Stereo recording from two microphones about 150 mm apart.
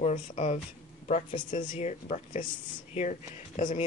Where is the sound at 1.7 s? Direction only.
50° left (ahead or behind).